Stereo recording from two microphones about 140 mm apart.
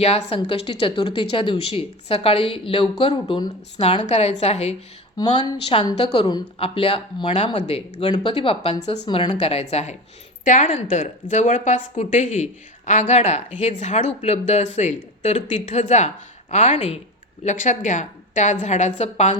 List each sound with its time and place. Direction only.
0.0 s a woman's voice: 45° left (ahead or behind)
5.1 s a woman's voice: 30° left (ahead or behind); by 9.0 s 45° left (ahead or behind)
9.0 s a woman's voice: 35° left (ahead or behind); by 16.7 s 55° left (ahead or behind)
16.7 s speech: 40° left (ahead or behind)
17.4 s speech: 60° left (ahead or behind)